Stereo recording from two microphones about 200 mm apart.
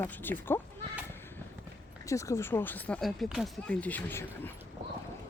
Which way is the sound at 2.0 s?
15° left (ahead or behind).